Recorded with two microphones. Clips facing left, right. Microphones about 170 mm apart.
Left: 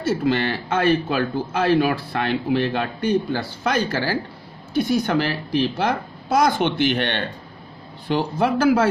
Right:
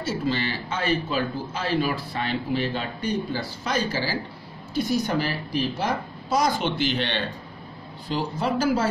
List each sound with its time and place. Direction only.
0.0 s speech: 60° left (ahead or behind)